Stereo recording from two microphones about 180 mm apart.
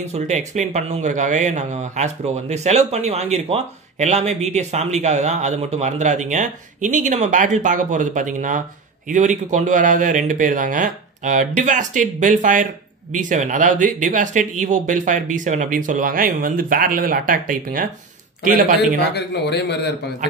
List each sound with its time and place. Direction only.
0.1 s speech: 40° right (ahead or behind)
19.1 s speech: 70° left (ahead or behind)